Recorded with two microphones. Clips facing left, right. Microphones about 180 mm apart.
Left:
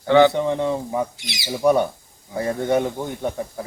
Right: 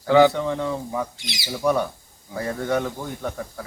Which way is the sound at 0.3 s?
20° left (ahead or behind).